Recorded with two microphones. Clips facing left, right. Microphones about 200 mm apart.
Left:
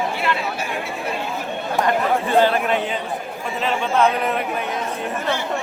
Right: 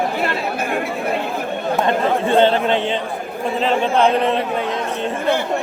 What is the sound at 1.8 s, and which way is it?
A man's voice, 25° right (ahead or behind).